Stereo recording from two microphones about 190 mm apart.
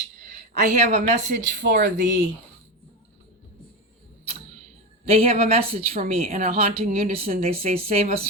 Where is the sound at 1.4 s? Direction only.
70° right (ahead or behind).